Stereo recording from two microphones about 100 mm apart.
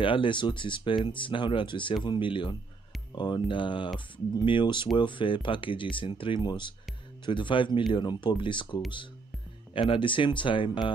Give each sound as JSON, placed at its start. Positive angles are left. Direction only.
{"t": 0.0, "sound": "speech", "side_deg": 60}